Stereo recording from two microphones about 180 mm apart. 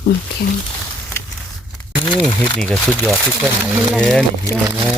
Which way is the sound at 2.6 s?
5° left (ahead or behind).